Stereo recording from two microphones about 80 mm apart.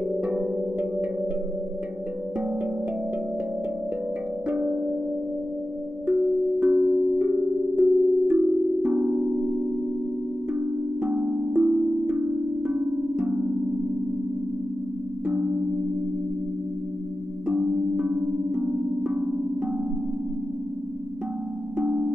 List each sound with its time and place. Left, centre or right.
0.1 s music: centre
4.5 s music: centre
6.0 s wind chime: centre
7.7 s singing bowl: centre
11.0 s music: centre
15.2 s music: right
17.5 s music: centre
21.7 s music: centre